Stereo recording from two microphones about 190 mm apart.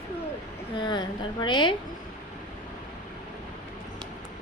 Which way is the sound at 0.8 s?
25° left (ahead or behind).